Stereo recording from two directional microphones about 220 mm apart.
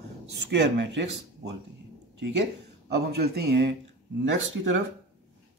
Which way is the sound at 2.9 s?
45° right (ahead or behind).